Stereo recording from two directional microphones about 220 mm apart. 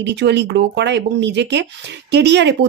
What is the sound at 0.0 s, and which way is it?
Speech, 50° right (ahead or behind).